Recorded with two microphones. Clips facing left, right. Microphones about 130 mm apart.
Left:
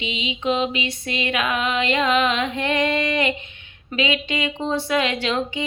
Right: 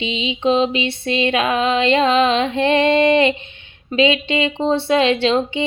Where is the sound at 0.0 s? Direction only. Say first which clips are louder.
Right 6 dB; 30° right (ahead or behind).